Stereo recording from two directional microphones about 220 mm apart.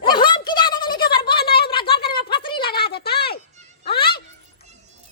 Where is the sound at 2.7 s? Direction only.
45° left (ahead or behind).